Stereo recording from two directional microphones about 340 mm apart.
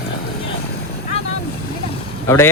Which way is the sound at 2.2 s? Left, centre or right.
Centre.